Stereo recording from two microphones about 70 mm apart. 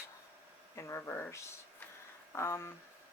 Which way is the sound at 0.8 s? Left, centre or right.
Left.